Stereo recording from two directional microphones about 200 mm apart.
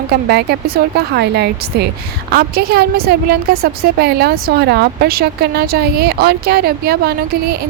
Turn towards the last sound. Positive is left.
turn(degrees=-50)  # may be behind; listen again after turning